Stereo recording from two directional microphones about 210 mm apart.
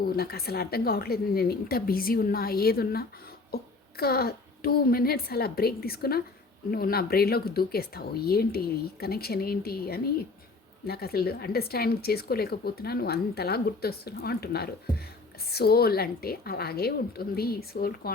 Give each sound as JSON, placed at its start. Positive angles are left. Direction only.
{"t": 0.0, "sound": "speech", "side_deg": 45}